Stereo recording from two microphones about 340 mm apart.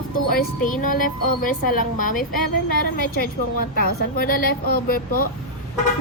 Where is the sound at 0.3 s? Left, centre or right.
Left.